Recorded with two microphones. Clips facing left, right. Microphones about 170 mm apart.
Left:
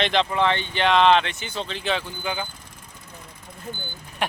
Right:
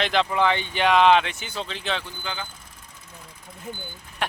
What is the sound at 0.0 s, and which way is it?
Speech, 5° right (ahead or behind).